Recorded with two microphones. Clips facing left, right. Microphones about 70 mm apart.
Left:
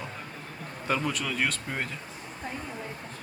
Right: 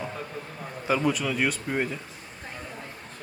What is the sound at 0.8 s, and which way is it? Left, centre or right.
Speech, centre.